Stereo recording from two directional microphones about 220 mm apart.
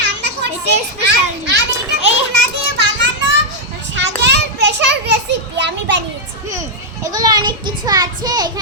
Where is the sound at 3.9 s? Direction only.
50° right (ahead or behind).